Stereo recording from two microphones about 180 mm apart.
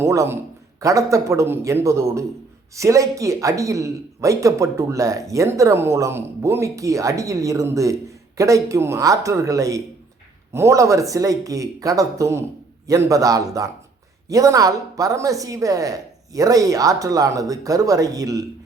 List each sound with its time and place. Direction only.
0.0 s a woman's voice: 15° right (ahead or behind)